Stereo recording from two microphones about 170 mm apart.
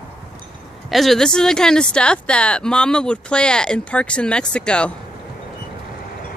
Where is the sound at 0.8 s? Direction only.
Centre (ahead or behind).